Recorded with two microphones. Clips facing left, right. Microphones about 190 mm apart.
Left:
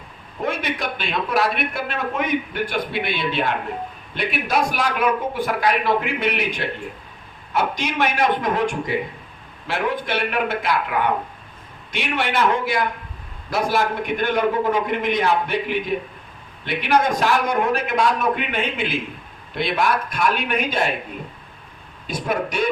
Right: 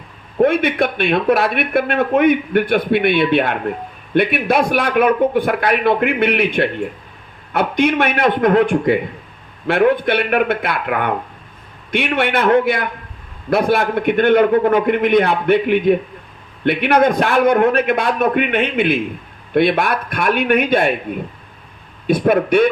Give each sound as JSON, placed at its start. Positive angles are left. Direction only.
{"t": 0.4, "sound": "speech", "side_deg": -60}
{"t": 22.0, "sound": "speech", "side_deg": -60}